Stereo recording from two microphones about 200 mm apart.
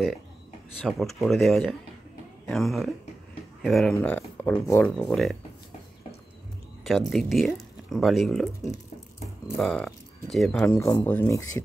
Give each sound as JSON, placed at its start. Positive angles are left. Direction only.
{"t": 0.8, "sound": "speech", "side_deg": 0}
{"t": 6.8, "sound": "speech", "side_deg": 0}
{"t": 9.6, "sound": "speech", "side_deg": 0}
{"t": 10.7, "sound": "speech", "side_deg": 20}